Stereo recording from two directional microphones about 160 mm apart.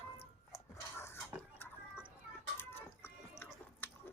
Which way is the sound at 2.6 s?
15° left (ahead or behind).